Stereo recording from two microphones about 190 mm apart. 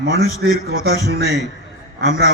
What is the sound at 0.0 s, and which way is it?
A man's voice, 55° right (ahead or behind).